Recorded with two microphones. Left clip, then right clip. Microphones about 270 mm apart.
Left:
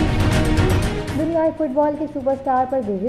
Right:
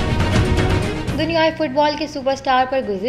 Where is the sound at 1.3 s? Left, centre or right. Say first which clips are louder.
Right 2 dB; right.